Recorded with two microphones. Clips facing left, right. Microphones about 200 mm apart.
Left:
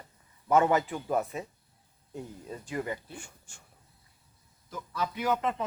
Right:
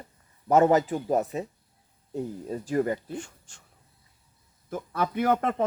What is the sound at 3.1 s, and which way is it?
Speech, 10° left (ahead or behind).